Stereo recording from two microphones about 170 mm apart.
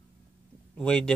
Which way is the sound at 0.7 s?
5° left (ahead or behind).